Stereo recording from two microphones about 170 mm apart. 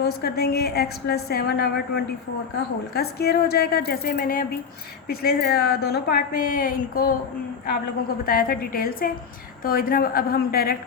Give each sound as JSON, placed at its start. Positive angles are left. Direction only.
{"t": 0.0, "sound": "a woman's voice", "side_deg": 70}
{"t": 8.2, "sound": "a woman's voice", "side_deg": 60}